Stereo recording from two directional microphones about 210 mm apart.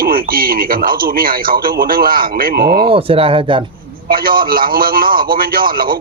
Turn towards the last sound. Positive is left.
turn(degrees=-45)  # may be behind; listen again after turning